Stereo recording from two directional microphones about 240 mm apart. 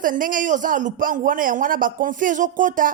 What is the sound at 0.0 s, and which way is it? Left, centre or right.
Speech, right.